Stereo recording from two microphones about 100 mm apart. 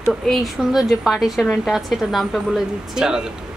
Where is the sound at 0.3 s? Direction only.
Centre (ahead or behind).